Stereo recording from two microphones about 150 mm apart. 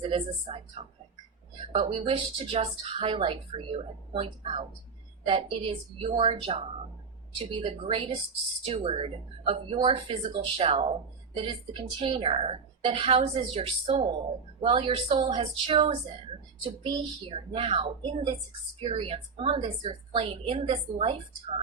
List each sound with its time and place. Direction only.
0.1 s speech: 40° right (ahead or behind)
1.7 s speech: 35° right (ahead or behind)
7.6 s speech: 40° right (ahead or behind)